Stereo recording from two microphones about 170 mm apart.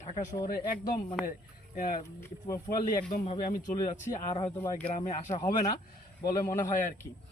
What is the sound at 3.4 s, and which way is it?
Speech, 50° left (ahead or behind).